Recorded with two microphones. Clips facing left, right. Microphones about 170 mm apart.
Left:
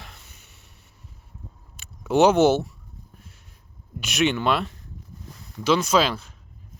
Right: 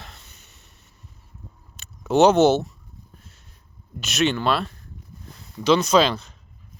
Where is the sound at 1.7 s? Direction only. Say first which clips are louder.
Right 1 dB; 10° left (ahead or behind).